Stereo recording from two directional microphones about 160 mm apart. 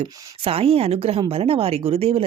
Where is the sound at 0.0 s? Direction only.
35° right (ahead or behind).